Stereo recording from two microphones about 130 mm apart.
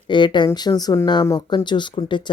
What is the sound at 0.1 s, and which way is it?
Speech, 35° left (ahead or behind).